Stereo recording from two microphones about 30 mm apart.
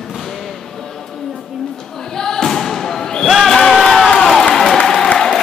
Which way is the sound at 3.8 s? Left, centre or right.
Centre.